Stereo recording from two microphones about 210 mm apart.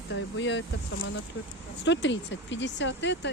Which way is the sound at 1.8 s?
60° left (ahead or behind).